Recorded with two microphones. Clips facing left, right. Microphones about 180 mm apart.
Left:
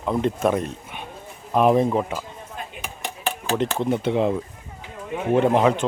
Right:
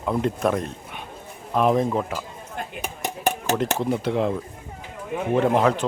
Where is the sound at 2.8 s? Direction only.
45° right (ahead or behind).